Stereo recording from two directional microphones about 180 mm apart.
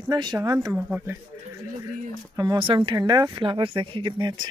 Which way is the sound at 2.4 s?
25° right (ahead or behind).